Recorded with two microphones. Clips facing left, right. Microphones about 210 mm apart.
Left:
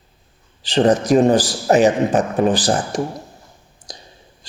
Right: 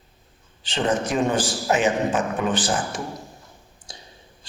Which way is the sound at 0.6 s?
35° left (ahead or behind).